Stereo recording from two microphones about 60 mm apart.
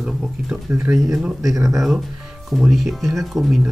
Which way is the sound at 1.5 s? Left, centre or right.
Right.